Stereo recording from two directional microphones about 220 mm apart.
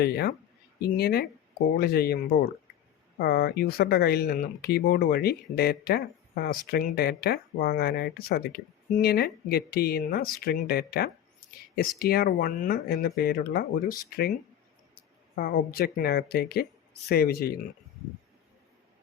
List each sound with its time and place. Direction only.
0.0 s speech: 45° left (ahead or behind)
15.4 s speech: 40° left (ahead or behind)